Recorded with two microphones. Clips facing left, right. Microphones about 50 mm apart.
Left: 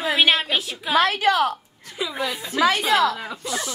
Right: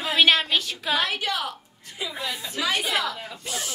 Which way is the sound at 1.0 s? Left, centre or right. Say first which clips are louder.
Left 11 dB; left.